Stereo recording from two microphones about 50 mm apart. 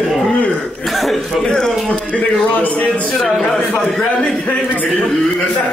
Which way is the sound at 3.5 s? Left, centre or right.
Left.